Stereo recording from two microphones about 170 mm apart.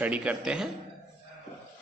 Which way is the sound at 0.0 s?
10° right (ahead or behind).